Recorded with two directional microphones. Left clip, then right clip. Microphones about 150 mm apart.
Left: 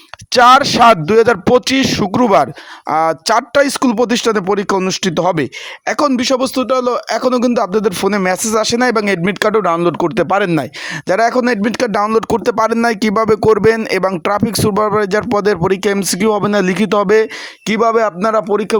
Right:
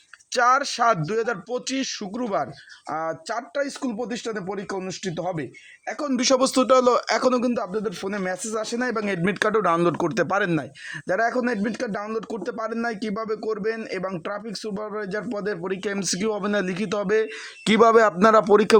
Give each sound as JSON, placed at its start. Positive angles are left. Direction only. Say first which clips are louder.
{"t": 0.3, "sound": "speech", "louder": "left 12 dB", "side_deg": 40}
{"t": 6.1, "sound": "speech", "louder": "left 5 dB", "side_deg": 30}
{"t": 6.6, "sound": "speech", "louder": "left 3 dB", "side_deg": 20}
{"t": 7.3, "sound": "speech", "louder": "left 11 dB", "side_deg": 50}
{"t": 11.1, "sound": "speech", "louder": "left 10 dB", "side_deg": 45}
{"t": 17.7, "sound": "speech", "louder": "left 3 dB", "side_deg": 10}